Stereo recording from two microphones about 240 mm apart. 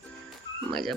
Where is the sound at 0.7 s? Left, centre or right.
Centre.